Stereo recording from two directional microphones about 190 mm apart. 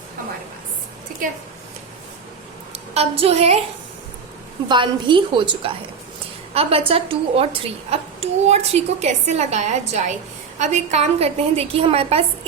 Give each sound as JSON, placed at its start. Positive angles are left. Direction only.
{"t": 2.7, "sound": "a woman's voice", "side_deg": -35}
{"t": 4.7, "sound": "a woman's voice", "side_deg": -25}